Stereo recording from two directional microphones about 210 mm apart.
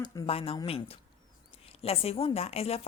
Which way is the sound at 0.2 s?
25° left (ahead or behind).